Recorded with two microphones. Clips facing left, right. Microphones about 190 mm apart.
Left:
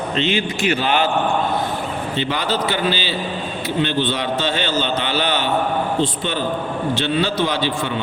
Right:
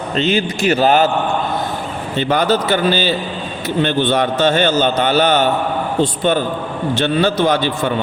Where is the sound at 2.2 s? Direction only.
45° right (ahead or behind).